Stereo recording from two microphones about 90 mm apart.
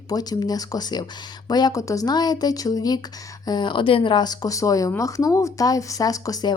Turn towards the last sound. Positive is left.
turn(degrees=40)  # may be behind; listen again after turning